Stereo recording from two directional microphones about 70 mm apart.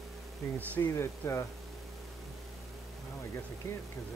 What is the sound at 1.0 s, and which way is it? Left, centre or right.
Speech, left.